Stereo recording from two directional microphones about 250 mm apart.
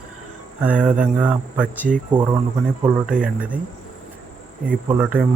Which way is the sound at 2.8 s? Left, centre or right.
Centre.